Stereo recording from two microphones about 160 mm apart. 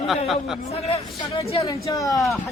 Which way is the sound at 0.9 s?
35° left (ahead or behind).